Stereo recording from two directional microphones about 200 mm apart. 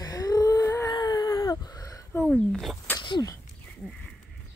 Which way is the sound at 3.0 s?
20° left (ahead or behind).